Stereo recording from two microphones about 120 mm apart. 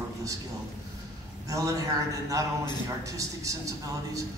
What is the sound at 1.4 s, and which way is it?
A man's voice, 25° right (ahead or behind).